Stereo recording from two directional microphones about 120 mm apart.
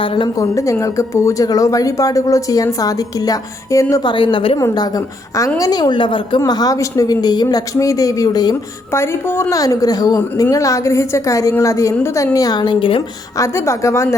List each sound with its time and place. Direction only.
0.0 s a woman's voice: 45° left (ahead or behind)
0.3 s speech: 25° left (ahead or behind)
4.1 s a woman's voice: 45° left (ahead or behind)
4.6 s speech: 30° left (ahead or behind)
6.4 s speech: 30° left (ahead or behind)
8.9 s speech: 20° left (ahead or behind); by 13.0 s 40° left (ahead or behind)
13.4 s speech: 25° left (ahead or behind)